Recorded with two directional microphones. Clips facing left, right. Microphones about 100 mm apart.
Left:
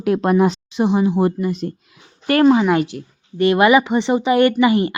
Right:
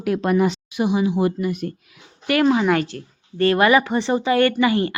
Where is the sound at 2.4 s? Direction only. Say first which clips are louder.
Left 5 dB; 10° left (ahead or behind).